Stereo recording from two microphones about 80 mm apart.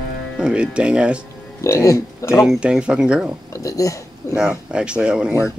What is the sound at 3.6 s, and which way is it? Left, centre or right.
Speech, left.